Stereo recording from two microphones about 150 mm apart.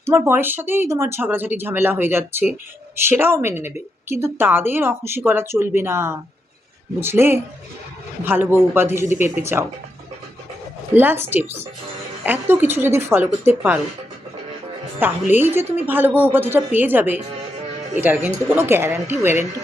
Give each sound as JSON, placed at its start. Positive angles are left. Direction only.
{"t": 0.0, "sound": "speech", "side_deg": -15}
{"t": 10.9, "sound": "speech", "side_deg": -15}
{"t": 15.0, "sound": "speech", "side_deg": -15}